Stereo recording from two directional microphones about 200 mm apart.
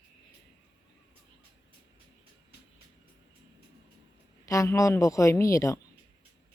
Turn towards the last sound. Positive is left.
turn(degrees=15)  # may be behind; listen again after turning